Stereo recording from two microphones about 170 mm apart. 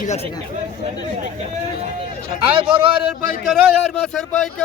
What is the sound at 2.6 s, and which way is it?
Speech, 30° right (ahead or behind).